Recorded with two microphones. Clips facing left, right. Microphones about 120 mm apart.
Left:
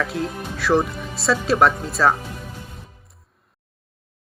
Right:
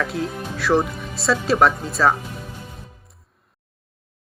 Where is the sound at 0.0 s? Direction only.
Centre (ahead or behind).